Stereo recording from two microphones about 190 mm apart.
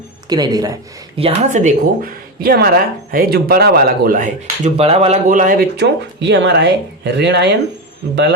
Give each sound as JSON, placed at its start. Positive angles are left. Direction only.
{"t": 0.3, "sound": "speech", "side_deg": -20}
{"t": 1.2, "sound": "speech", "side_deg": -40}
{"t": 4.8, "sound": "speech", "side_deg": -30}
{"t": 5.7, "sound": "speech", "side_deg": -65}